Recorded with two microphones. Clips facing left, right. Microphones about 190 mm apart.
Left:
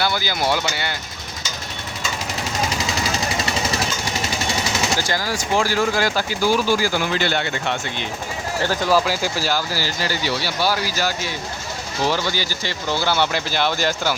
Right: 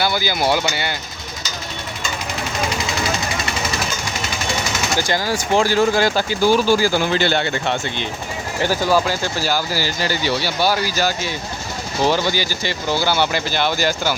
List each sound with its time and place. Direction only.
0.0 s speech: 10° right (ahead or behind)
4.9 s speech: 20° right (ahead or behind)
8.6 s speech: 5° right (ahead or behind)
9.6 s speech: 15° right (ahead or behind)
12.1 s speech: 15° right (ahead or behind)